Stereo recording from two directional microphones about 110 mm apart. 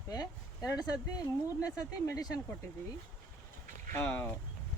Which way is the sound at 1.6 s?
35° left (ahead or behind).